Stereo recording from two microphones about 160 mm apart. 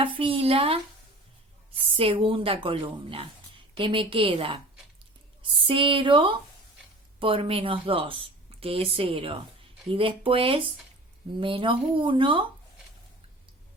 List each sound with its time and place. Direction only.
0.0 s a woman's voice: 30° right (ahead or behind)
2.0 s a woman's voice: 35° right (ahead or behind)